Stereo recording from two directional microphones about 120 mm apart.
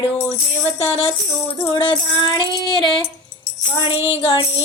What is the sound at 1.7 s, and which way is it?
Speech, 40° left (ahead or behind).